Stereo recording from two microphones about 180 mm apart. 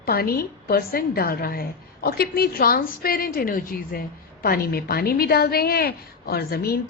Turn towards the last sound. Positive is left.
turn(degrees=60)  # may be behind; listen again after turning